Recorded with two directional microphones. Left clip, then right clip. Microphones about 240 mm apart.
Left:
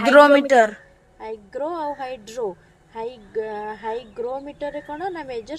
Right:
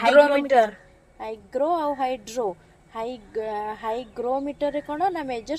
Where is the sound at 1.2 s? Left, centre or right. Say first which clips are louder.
Right 3 dB; right.